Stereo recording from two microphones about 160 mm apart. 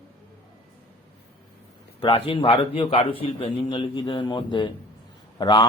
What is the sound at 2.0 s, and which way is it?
A man's voice, 35° left (ahead or behind).